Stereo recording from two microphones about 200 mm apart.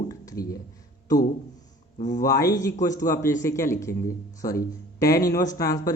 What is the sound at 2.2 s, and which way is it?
Speech, 15° left (ahead or behind).